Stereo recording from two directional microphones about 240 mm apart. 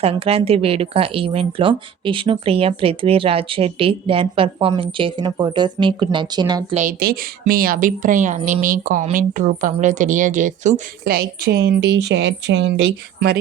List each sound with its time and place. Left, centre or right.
0.0 s speech: right
6.7 s a woman's voice: right